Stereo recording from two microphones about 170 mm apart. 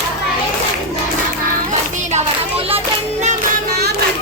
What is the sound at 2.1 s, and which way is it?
Child singing, 35° right (ahead or behind).